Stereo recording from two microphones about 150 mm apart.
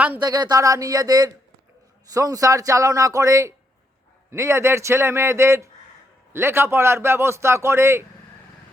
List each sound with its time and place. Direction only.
0.2 s a man's voice: 30° right (ahead or behind)